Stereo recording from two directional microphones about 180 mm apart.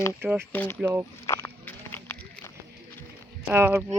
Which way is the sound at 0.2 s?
10° right (ahead or behind).